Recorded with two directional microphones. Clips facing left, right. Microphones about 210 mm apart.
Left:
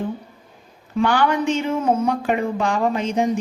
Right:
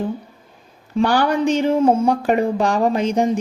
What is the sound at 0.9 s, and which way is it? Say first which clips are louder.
Speech: right 2 dB; 35° right (ahead or behind).